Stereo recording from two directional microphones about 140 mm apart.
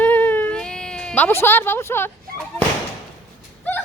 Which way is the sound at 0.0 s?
10° left (ahead or behind).